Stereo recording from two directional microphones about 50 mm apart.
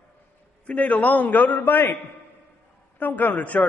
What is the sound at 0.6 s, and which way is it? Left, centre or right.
A man's voice, left.